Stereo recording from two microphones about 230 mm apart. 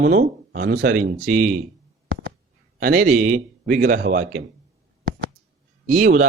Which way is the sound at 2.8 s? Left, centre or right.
Right.